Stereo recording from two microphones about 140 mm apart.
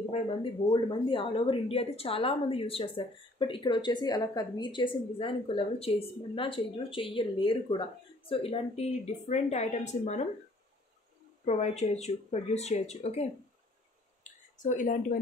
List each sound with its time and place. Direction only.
0.1 s a woman's voice: 40° left (ahead or behind); by 10.2 s 55° left (ahead or behind)
11.4 s speech: 50° left (ahead or behind)
14.6 s speech: 65° left (ahead or behind)